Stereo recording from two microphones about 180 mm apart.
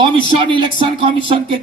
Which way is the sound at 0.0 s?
30° right (ahead or behind).